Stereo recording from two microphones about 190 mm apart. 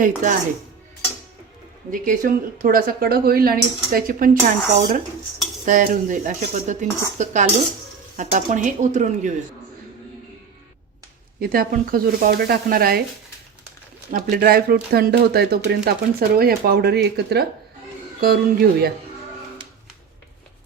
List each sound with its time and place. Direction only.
0.0 s speech: 45° right (ahead or behind)
1.9 s speech: 45° right (ahead or behind)
11.3 s speech: 50° right (ahead or behind)
14.1 s speech: 50° right (ahead or behind)